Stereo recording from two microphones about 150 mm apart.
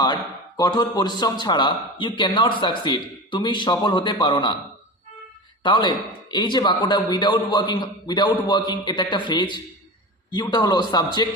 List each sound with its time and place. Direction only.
0.0 s speech: 30° left (ahead or behind)
5.6 s a man's voice: 30° left (ahead or behind)